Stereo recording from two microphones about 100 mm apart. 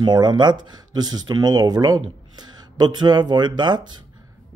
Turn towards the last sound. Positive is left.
turn(degrees=-50)  # may be behind; listen again after turning